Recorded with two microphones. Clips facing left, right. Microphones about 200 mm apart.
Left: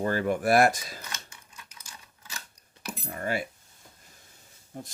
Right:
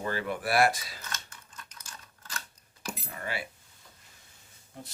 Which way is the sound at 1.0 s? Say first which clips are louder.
Even; 10° left (ahead or behind).